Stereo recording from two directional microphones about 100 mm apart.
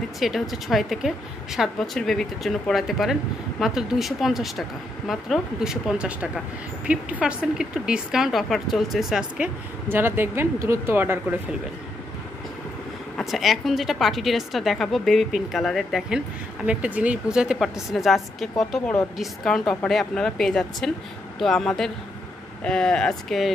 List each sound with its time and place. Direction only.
0.2 s speech: centre (ahead or behind)
9.8 s speech: 20° right (ahead or behind)
13.2 s speech: centre (ahead or behind)
16.6 s speech: 10° right (ahead or behind); by 23.5 s 5° left (ahead or behind)